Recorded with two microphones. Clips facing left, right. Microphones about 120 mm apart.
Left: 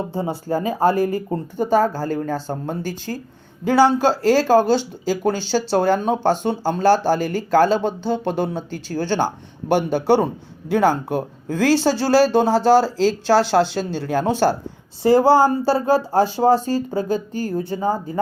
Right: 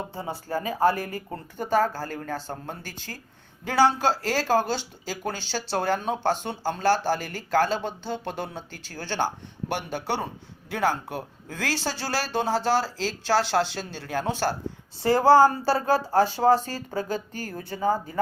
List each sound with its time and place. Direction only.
0.1 s speech: 25° left (ahead or behind)
1.7 s speech: 15° left (ahead or behind); by 14.4 s 30° left (ahead or behind)
15.0 s speech: 10° left (ahead or behind)